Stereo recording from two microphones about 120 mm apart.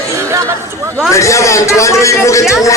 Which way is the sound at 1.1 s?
25° left (ahead or behind).